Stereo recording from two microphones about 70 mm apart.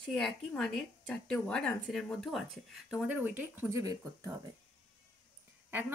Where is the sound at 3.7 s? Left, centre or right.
Right.